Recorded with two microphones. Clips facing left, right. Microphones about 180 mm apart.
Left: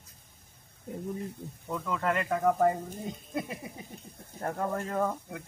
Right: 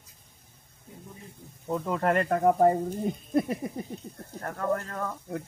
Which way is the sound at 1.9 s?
45° right (ahead or behind).